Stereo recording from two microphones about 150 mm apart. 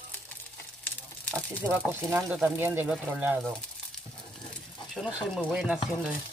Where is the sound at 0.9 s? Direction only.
10° left (ahead or behind).